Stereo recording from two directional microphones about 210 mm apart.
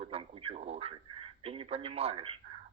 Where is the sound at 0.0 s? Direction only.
25° right (ahead or behind).